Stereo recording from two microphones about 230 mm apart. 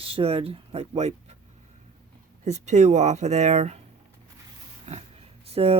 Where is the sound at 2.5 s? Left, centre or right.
Right.